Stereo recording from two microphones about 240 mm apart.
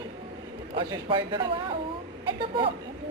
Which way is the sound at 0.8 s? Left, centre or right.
Centre.